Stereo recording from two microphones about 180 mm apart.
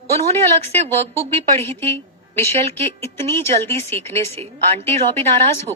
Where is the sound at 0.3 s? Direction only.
35° right (ahead or behind).